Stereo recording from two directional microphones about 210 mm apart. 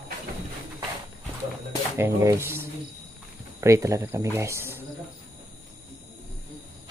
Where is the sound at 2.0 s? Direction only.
10° right (ahead or behind).